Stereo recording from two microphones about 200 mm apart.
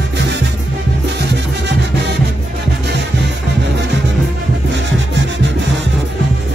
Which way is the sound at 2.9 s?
60° right (ahead or behind).